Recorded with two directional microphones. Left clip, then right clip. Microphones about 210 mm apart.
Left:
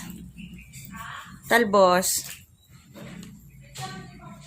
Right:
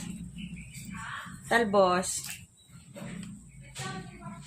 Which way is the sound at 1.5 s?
40° left (ahead or behind).